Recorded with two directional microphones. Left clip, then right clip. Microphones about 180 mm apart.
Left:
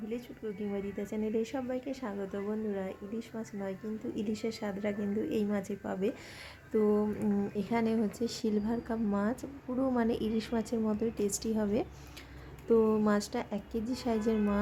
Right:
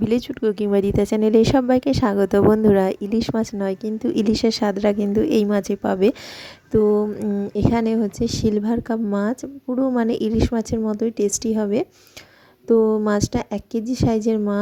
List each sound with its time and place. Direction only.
0.1 s speech: 55° right (ahead or behind)
6.7 s a woman's voice: 35° right (ahead or behind)